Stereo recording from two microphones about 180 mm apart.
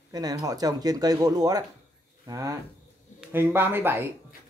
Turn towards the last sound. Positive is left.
turn(degrees=-15)  # may be behind; listen again after turning